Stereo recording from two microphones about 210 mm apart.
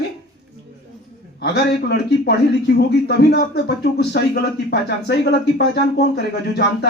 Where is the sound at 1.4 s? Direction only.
55° left (ahead or behind).